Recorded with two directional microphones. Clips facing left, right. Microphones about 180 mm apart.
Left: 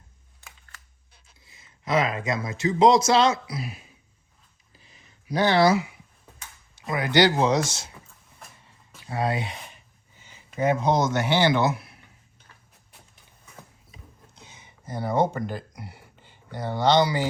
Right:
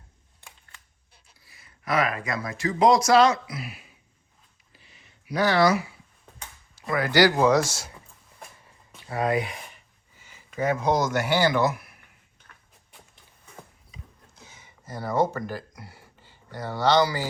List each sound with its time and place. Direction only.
1.5 s speech: 20° left (ahead or behind)
5.3 s speech: 25° left (ahead or behind)
9.2 s speech: 25° left (ahead or behind)
14.3 s a sound: 20° left (ahead or behind)